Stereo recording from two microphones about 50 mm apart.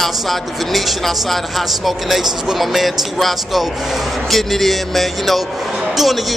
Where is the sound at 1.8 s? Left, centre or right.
Centre.